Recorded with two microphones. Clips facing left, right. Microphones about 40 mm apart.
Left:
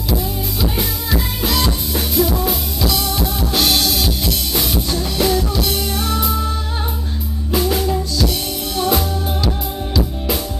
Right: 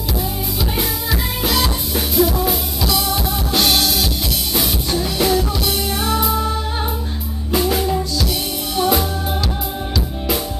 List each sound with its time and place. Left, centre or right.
0.1 s drum kit: centre
4.6 s music: centre
7.5 s music: centre